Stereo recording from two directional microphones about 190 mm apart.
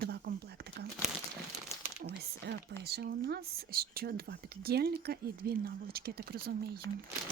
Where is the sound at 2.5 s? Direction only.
65° right (ahead or behind).